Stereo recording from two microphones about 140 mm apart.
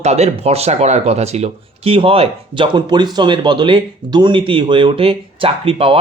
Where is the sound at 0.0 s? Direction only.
50° right (ahead or behind).